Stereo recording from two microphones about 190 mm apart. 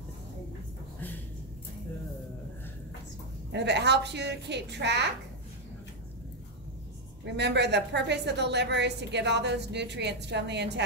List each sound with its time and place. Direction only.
3.5 s a woman's voice: 65° right (ahead or behind)
7.3 s a woman's voice: 65° right (ahead or behind)